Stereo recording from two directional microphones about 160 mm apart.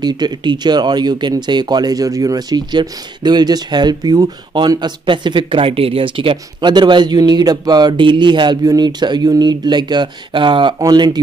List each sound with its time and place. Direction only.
0.0 s speech: 30° right (ahead or behind)